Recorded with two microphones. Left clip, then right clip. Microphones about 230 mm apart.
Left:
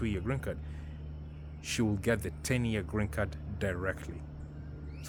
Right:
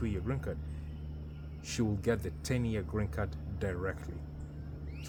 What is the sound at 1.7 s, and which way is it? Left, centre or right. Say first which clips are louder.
Speech: left 2 dB; left.